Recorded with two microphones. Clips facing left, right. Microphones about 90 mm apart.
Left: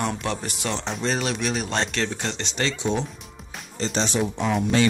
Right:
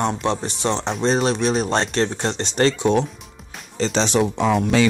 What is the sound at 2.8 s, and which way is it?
Speech, 65° right (ahead or behind).